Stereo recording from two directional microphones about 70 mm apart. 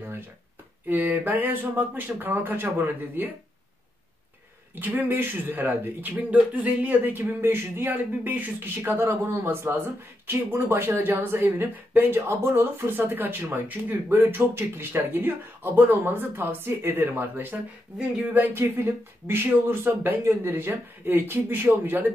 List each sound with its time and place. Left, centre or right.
0.8 s speech: right
5.0 s speech: right
18.6 s speech: right